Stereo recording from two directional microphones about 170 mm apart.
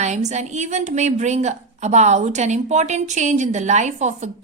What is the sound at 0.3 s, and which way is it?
A woman's voice, 45° right (ahead or behind).